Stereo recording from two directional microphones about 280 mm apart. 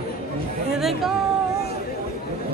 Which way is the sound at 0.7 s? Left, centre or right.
Centre.